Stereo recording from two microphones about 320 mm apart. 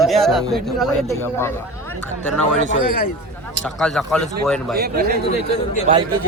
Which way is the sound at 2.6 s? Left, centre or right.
Left.